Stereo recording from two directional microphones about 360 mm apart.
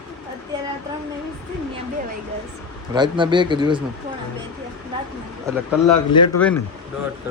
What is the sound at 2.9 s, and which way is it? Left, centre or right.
Speech, centre.